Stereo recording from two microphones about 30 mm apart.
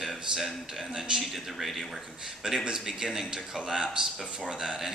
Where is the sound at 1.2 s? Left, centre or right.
Centre.